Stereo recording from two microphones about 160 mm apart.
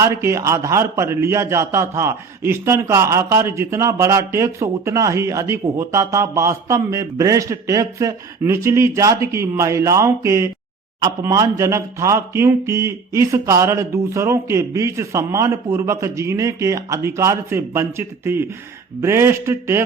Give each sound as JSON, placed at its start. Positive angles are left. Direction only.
{"t": 0.0, "sound": "a man's voice", "side_deg": -20}